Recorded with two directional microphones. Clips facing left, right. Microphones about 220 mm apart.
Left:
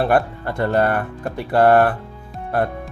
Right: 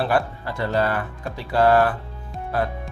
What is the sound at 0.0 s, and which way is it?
Speech, 55° left (ahead or behind).